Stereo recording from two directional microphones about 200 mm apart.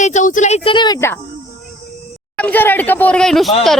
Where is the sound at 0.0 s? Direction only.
35° left (ahead or behind).